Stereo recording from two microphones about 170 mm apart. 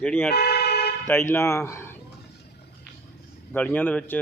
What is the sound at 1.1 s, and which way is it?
Speech, 15° left (ahead or behind).